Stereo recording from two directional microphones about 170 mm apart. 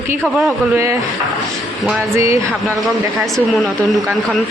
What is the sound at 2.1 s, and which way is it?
Speech, 20° right (ahead or behind).